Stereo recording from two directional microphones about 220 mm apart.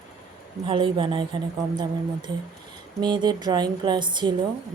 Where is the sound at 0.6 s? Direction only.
25° right (ahead or behind).